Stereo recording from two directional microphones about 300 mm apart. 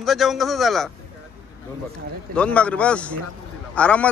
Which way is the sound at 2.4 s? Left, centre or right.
Centre.